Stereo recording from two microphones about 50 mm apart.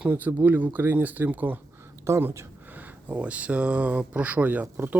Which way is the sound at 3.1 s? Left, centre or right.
Right.